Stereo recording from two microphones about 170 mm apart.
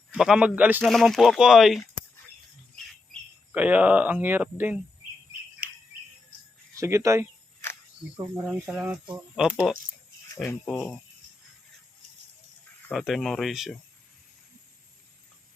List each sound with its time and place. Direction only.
0.1 s speech: 5° right (ahead or behind)
3.5 s speech: 10° right (ahead or behind)
6.7 s speech: 20° right (ahead or behind); by 9.7 s centre (ahead or behind)
10.4 s speech: 10° left (ahead or behind)
12.9 s speech: centre (ahead or behind)